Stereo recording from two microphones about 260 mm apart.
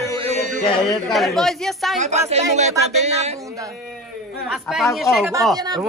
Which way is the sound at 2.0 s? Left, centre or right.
Right.